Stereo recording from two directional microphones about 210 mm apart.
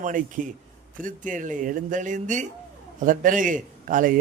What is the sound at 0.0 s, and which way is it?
A man's voice, 40° right (ahead or behind).